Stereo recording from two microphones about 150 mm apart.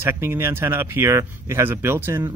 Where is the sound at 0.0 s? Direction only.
15° right (ahead or behind).